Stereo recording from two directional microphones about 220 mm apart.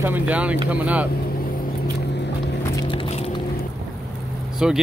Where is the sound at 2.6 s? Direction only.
15° left (ahead or behind).